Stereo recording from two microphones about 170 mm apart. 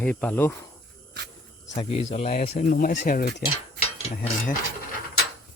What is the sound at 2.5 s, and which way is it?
Speech, 55° left (ahead or behind).